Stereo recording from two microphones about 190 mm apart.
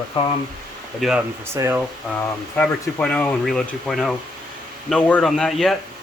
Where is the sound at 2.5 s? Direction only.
10° left (ahead or behind).